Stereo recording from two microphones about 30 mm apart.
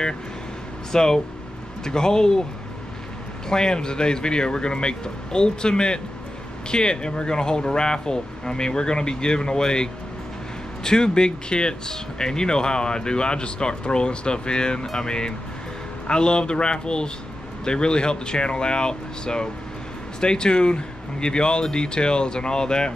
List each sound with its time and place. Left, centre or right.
0.9 s speech: centre
3.4 s speech: left